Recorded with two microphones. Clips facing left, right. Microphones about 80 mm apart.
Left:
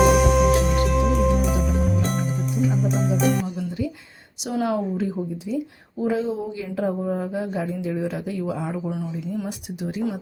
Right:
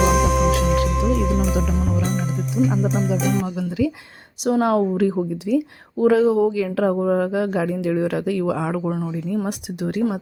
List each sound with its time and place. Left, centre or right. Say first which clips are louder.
0.0 s music: left 1 dB; centre
3.4 s music: right 5 dB; right
4.6 s a woman's voice: right 4 dB; right